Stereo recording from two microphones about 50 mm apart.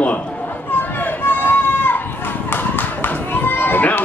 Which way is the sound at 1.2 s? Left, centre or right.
Left.